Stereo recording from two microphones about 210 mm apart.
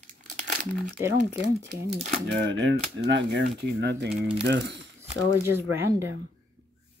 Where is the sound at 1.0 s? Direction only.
10° right (ahead or behind).